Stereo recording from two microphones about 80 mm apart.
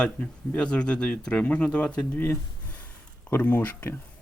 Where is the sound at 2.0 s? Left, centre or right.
Left.